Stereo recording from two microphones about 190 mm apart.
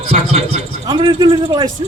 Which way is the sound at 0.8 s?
20° right (ahead or behind).